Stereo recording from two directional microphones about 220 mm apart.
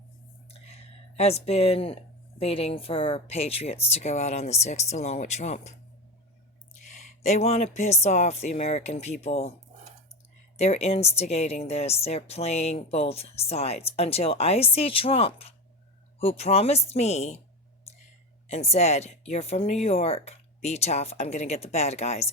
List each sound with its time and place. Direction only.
0.7 s speech: 30° left (ahead or behind)
6.9 s speech: 35° left (ahead or behind)
10.6 s speech: 30° left (ahead or behind)
18.4 s speech: 30° left (ahead or behind)